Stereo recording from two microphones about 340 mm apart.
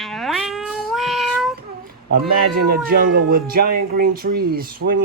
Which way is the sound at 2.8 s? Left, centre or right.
Right.